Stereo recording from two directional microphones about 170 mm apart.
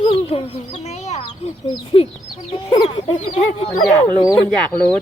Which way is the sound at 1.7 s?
30° left (ahead or behind).